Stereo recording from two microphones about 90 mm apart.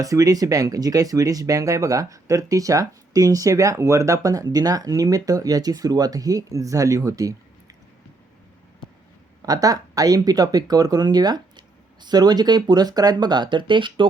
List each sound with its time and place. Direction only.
0.0 s speech: 40° right (ahead or behind)
9.5 s speech: 40° right (ahead or behind); by 14.1 s 65° right (ahead or behind)